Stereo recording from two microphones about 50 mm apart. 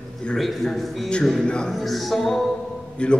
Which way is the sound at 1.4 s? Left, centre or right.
Centre.